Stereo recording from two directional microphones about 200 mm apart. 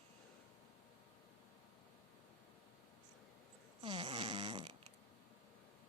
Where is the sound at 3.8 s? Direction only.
25° right (ahead or behind).